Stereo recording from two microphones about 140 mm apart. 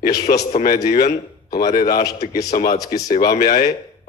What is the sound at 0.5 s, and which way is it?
Speech, 65° left (ahead or behind).